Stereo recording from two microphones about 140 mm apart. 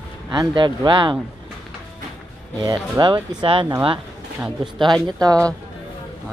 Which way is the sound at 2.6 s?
30° right (ahead or behind).